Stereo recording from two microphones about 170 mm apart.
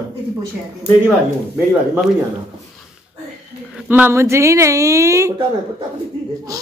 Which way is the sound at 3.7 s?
10° right (ahead or behind).